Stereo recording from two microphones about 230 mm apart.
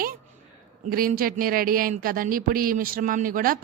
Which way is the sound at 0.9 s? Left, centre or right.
Right.